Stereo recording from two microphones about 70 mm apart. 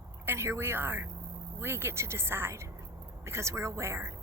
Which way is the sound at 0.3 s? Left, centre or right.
Right.